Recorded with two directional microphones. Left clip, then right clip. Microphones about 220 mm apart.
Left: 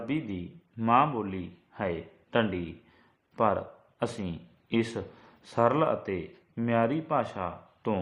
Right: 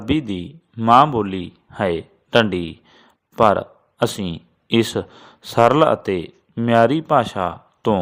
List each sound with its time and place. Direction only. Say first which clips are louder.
0.0 s a man's voice: right 11 dB; 45° right (ahead or behind)